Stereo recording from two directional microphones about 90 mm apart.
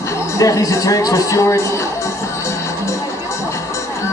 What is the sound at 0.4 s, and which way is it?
A man's voice, 40° left (ahead or behind).